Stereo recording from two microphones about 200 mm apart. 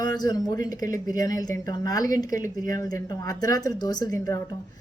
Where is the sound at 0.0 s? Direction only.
20° left (ahead or behind).